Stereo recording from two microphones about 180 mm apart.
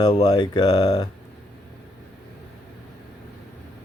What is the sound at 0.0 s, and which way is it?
Speech, 25° left (ahead or behind).